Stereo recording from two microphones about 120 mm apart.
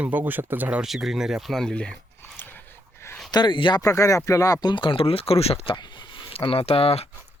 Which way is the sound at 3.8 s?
25° left (ahead or behind).